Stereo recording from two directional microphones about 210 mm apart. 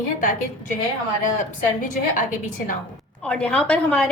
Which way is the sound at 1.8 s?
40° left (ahead or behind).